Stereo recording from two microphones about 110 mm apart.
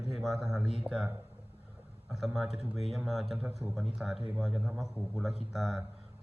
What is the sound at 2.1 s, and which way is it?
A man's voice, 5° right (ahead or behind).